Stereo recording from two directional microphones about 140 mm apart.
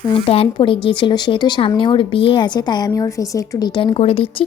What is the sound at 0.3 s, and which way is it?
A woman's voice, 40° left (ahead or behind).